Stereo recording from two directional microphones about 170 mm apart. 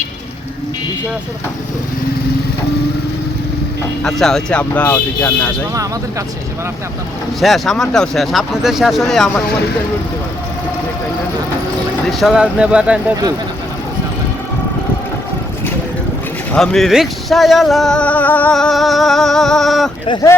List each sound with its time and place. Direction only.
4.0 s speech: 5° left (ahead or behind)
5.7 s speech: 20° right (ahead or behind)
7.4 s speech: centre (ahead or behind)
12.0 s speech: centre (ahead or behind)
16.5 s speech: centre (ahead or behind)